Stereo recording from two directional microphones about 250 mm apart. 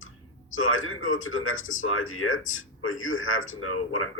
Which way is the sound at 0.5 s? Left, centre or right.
Left.